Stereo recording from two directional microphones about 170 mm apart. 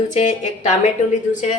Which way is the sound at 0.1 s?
45° left (ahead or behind).